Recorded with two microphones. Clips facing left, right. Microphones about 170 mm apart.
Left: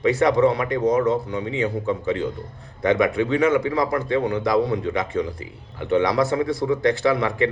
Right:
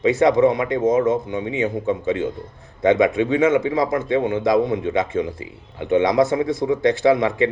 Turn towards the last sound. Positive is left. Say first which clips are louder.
# right 4 dB
turn(degrees=-20)  # may be behind; listen again after turning